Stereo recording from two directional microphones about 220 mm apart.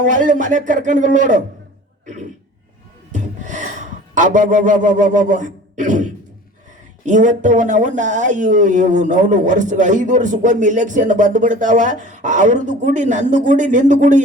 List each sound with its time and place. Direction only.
0.0 s speech: 35° right (ahead or behind)
3.1 s speech: 35° right (ahead or behind)